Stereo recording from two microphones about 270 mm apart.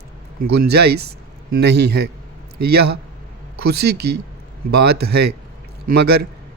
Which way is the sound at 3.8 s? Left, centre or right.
Right.